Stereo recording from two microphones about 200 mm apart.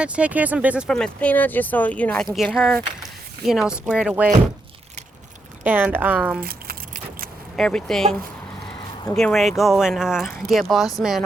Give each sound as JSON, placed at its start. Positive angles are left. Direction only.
{"t": 0.0, "sound": "speech", "side_deg": -5}
{"t": 5.6, "sound": "speech", "side_deg": -10}
{"t": 6.4, "sound": "a sound", "side_deg": -50}
{"t": 7.5, "sound": "speech", "side_deg": 5}
{"t": 9.1, "sound": "speech", "side_deg": 0}